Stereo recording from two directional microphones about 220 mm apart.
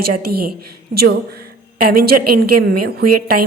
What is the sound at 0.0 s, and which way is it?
Speech, 45° right (ahead or behind).